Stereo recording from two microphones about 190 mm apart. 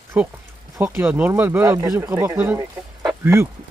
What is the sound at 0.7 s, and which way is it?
Speech, 10° right (ahead or behind).